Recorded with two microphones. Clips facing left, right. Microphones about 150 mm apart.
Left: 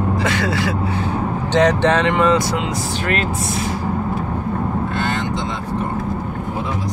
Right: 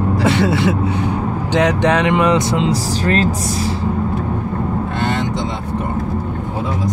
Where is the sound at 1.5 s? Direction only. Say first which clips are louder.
Even; 10° right (ahead or behind); by 3.2 s 35° right (ahead or behind).